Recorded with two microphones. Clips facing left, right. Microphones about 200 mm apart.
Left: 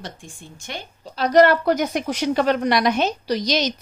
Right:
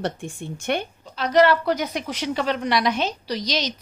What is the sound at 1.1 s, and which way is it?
Speech, 40° left (ahead or behind).